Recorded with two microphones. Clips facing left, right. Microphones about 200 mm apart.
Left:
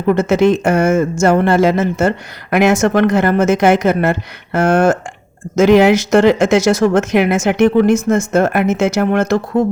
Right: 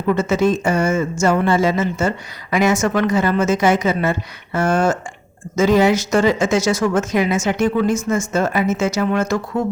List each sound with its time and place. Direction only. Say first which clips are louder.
0.1 s speech: left 5 dB; 65° left (ahead or behind)